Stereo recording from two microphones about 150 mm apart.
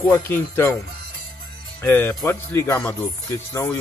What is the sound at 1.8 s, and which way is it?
Speech, 20° left (ahead or behind).